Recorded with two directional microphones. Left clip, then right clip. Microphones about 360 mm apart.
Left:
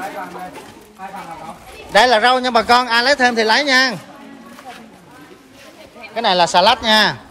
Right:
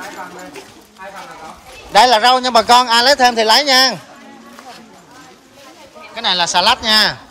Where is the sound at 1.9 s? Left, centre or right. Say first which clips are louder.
Right 2 dB; centre.